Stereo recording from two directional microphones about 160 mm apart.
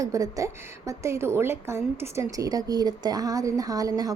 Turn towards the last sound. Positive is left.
turn(degrees=-20)  # may be behind; listen again after turning